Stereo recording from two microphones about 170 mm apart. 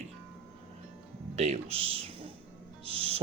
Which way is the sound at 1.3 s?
40° right (ahead or behind).